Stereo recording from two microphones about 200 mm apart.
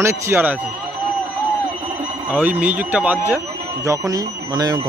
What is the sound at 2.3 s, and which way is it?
Speech, 10° right (ahead or behind).